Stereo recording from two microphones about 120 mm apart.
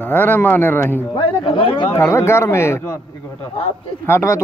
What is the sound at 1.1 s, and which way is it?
Speech, 45° left (ahead or behind).